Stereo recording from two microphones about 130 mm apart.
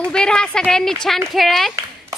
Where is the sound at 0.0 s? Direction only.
5° left (ahead or behind).